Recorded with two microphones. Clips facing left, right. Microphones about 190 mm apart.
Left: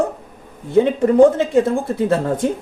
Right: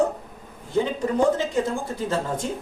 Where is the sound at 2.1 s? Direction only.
65° left (ahead or behind).